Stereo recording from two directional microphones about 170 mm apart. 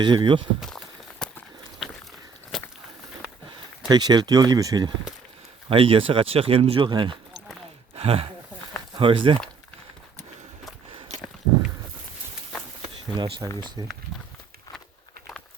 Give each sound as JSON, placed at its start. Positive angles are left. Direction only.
{"t": 0.0, "sound": "speech", "side_deg": -30}
{"t": 0.6, "sound": "walk", "side_deg": 5}
{"t": 2.5, "sound": "a sound", "side_deg": 0}
{"t": 3.8, "sound": "speech", "side_deg": -25}
{"t": 5.6, "sound": "speech", "side_deg": -30}
{"t": 12.9, "sound": "a sound", "side_deg": -30}
{"t": 13.8, "sound": "speech", "side_deg": -25}